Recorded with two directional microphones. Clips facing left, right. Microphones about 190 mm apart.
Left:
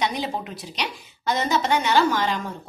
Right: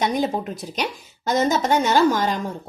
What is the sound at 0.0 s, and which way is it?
A woman's voice, 45° right (ahead or behind).